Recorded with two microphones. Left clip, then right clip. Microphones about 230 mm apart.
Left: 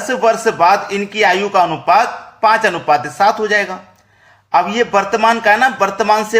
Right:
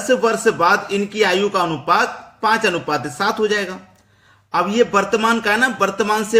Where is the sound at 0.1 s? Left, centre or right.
Centre.